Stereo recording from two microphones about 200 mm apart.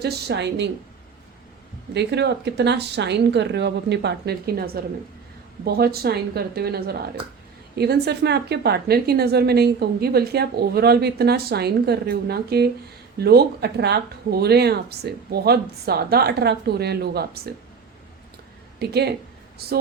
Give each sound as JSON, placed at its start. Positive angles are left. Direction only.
{"t": 0.0, "sound": "speech", "side_deg": -55}
{"t": 1.9, "sound": "a woman's voice", "side_deg": -60}
{"t": 18.8, "sound": "a woman's voice", "side_deg": -55}